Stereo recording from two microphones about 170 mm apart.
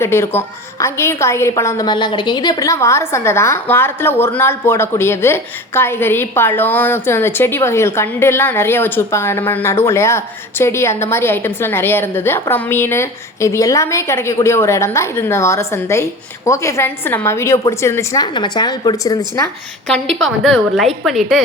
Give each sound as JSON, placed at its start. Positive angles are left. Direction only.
{"t": 0.0, "sound": "a woman's voice", "side_deg": 15}
{"t": 19.9, "sound": "a woman's voice", "side_deg": 0}